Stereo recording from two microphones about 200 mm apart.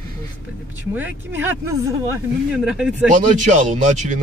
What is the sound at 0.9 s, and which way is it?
Speech, 10° right (ahead or behind).